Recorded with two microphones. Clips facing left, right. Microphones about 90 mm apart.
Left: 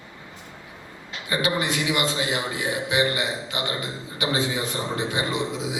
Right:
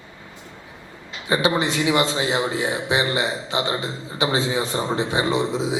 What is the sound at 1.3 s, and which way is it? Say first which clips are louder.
A man's voice: right 4 dB; 25° right (ahead or behind).